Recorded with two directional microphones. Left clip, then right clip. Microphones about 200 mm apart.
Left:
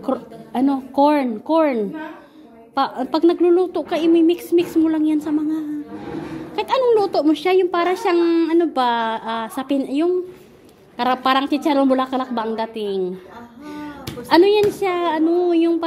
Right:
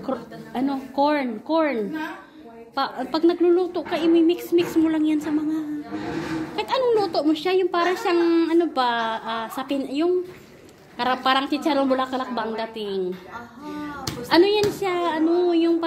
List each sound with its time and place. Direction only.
0.0 s a woman's voice: 50° left (ahead or behind)
13.7 s a sound: 45° left (ahead or behind)
14.3 s a woman's voice: 45° left (ahead or behind)